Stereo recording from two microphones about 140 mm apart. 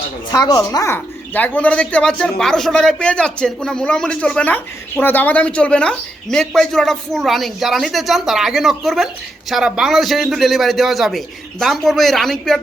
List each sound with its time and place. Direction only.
0.3 s speech: 30° left (ahead or behind)
0.9 s speech: 10° left (ahead or behind)